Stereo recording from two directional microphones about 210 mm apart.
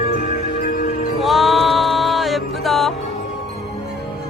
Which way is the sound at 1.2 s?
Centre (ahead or behind).